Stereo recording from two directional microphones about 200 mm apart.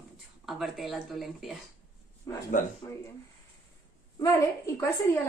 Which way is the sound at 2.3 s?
20° left (ahead or behind).